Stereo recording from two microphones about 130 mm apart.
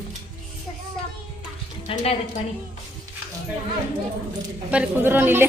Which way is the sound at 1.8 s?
50° left (ahead or behind).